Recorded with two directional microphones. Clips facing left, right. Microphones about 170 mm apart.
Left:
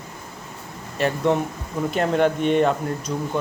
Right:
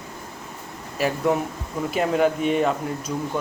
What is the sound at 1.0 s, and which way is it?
Speech, 5° right (ahead or behind).